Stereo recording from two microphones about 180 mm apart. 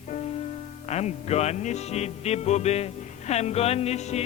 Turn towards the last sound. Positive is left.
turn(degrees=35)  # may be behind; listen again after turning